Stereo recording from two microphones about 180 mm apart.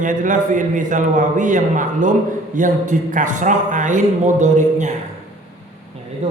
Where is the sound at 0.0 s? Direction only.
45° right (ahead or behind).